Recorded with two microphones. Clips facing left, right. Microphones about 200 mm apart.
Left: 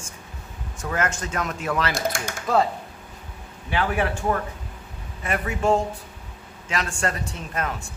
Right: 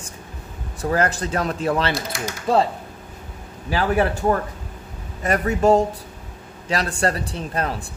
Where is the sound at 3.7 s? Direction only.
35° right (ahead or behind).